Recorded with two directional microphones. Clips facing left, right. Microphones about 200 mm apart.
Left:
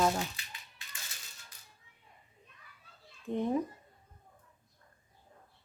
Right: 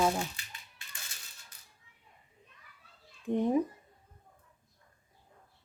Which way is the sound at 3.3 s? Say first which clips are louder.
Right 3 dB; 15° right (ahead or behind).